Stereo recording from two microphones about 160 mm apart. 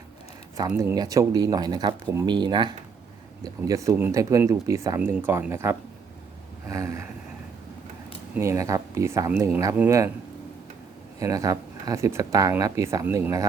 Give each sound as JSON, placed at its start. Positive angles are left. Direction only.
{"t": 0.8, "sound": "speech", "side_deg": -20}
{"t": 8.4, "sound": "speech", "side_deg": -20}
{"t": 11.2, "sound": "speech", "side_deg": -20}